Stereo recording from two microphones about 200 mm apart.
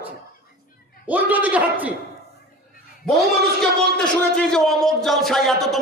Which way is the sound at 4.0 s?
5° left (ahead or behind).